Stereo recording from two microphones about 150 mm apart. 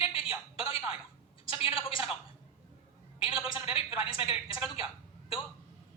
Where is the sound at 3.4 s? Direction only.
35° left (ahead or behind).